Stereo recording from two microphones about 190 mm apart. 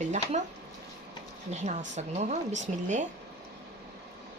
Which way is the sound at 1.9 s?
40° right (ahead or behind).